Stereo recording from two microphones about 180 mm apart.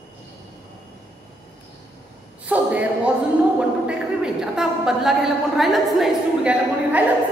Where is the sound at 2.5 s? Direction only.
10° right (ahead or behind).